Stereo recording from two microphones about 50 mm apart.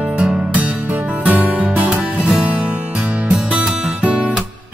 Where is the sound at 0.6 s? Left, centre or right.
Right.